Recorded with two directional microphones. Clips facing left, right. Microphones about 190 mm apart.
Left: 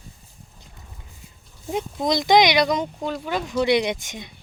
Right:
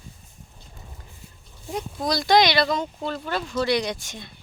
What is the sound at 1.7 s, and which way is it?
Speech, 20° left (ahead or behind).